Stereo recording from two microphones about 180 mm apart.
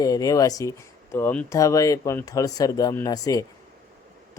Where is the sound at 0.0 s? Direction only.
20° left (ahead or behind).